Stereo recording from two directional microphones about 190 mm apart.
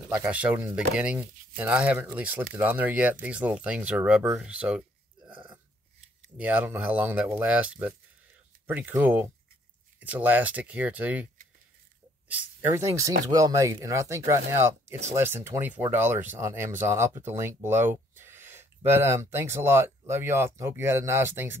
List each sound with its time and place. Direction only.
0.1 s speech: 10° right (ahead or behind)
5.2 s a sound: 25° right (ahead or behind)
6.3 s speech: 10° right (ahead or behind)
12.3 s speech: 10° right (ahead or behind)